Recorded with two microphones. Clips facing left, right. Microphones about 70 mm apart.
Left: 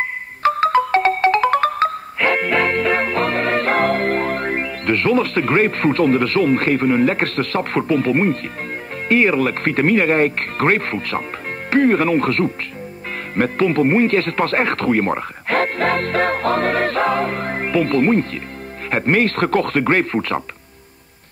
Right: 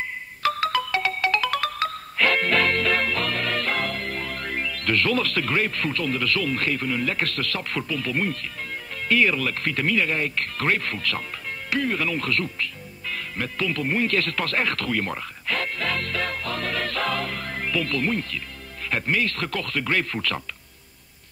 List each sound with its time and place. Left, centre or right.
0.4 s music: left
9.1 s speech: left